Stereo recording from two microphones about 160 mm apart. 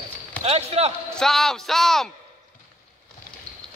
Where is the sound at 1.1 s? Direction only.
5° left (ahead or behind).